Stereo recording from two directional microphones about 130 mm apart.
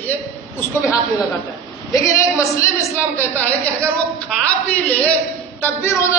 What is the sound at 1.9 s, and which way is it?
A woman's voice, 25° left (ahead or behind).